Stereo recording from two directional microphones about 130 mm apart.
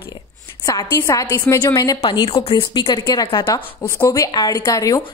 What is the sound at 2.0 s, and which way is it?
A woman's voice, 40° left (ahead or behind).